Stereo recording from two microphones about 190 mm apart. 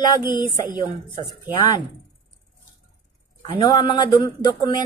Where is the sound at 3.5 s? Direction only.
20° left (ahead or behind).